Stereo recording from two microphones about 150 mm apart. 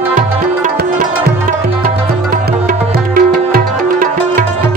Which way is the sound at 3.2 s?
65° right (ahead or behind).